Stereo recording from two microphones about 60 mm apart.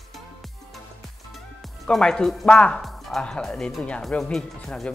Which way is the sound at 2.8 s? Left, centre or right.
Centre.